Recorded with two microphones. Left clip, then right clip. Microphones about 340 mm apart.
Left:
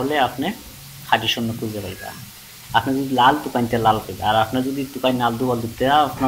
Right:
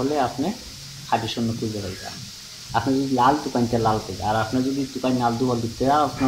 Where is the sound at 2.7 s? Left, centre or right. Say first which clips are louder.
Left 3 dB; centre.